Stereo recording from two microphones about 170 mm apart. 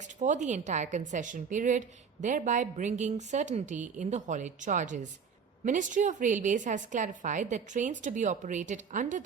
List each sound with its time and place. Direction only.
0.2 s a woman's voice: 45° right (ahead or behind)